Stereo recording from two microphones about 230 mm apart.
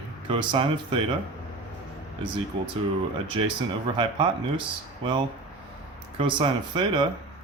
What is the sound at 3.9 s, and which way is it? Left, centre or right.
Speech, right.